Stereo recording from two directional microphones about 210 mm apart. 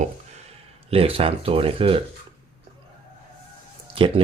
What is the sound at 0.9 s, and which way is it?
Speech, 25° right (ahead or behind).